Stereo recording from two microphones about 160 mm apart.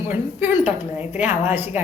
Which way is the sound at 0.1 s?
10° right (ahead or behind).